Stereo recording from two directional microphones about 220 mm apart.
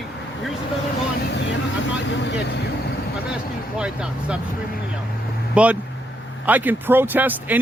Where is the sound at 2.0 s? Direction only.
55° left (ahead or behind).